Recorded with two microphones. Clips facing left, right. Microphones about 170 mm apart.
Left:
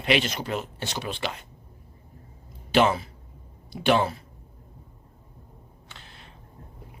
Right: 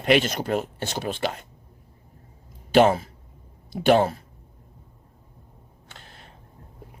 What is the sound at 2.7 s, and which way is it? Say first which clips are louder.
Speech: right 4 dB; 45° right (ahead or behind).